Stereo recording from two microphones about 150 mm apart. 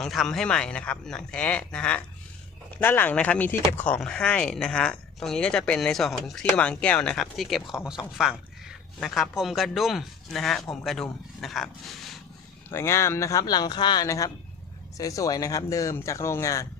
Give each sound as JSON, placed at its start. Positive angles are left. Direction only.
{"t": 0.0, "sound": "speech", "side_deg": 5}
{"t": 8.2, "sound": "a sound", "side_deg": -5}
{"t": 9.4, "sound": "speech", "side_deg": 0}
{"t": 12.6, "sound": "speech", "side_deg": 15}